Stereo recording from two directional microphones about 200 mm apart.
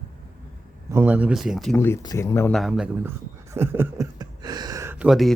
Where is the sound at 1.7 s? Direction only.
10° left (ahead or behind).